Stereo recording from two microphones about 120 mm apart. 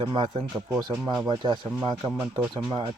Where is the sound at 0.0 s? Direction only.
40° right (ahead or behind).